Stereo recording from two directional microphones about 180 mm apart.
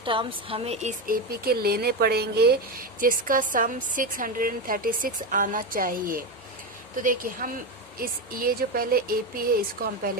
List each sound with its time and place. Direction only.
0.0 s speech: 30° right (ahead or behind); by 10.0 s 60° right (ahead or behind)